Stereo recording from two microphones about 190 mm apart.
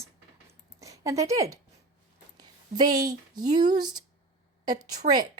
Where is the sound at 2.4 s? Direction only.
20° right (ahead or behind).